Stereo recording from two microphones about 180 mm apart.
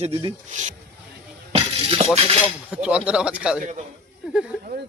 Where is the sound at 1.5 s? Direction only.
35° right (ahead or behind).